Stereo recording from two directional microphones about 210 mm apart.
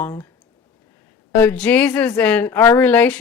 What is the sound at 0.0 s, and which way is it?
Speech, 20° left (ahead or behind).